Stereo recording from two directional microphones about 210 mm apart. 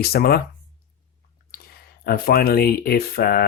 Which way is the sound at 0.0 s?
50° left (ahead or behind).